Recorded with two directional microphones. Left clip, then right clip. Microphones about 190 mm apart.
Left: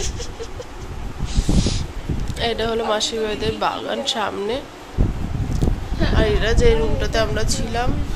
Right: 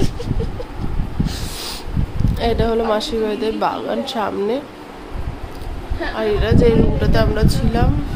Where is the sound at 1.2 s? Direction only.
30° right (ahead or behind).